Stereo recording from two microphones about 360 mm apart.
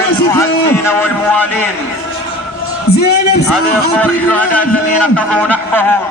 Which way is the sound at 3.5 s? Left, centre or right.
Centre.